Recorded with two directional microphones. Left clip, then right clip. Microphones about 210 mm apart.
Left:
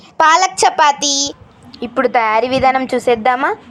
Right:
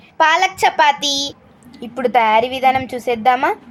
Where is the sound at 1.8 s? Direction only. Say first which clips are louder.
Left 1 dB; 25° left (ahead or behind).